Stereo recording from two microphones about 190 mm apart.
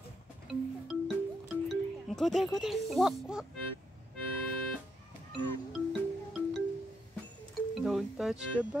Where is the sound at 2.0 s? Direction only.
Centre (ahead or behind).